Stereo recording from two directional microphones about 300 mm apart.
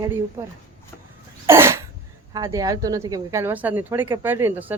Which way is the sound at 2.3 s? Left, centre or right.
Centre.